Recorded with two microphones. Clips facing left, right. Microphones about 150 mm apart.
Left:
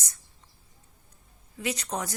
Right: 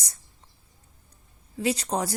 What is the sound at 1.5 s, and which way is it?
Speech, 30° right (ahead or behind).